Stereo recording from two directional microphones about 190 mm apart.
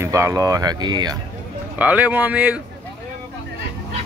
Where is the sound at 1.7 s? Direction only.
10° right (ahead or behind).